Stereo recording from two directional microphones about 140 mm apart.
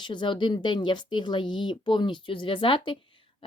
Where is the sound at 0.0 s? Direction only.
35° left (ahead or behind).